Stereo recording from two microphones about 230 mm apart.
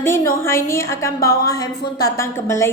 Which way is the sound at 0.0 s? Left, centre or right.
Centre.